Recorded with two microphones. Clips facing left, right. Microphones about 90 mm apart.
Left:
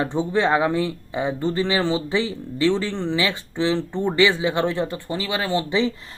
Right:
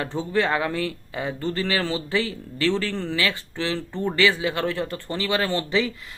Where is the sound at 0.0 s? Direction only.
20° left (ahead or behind).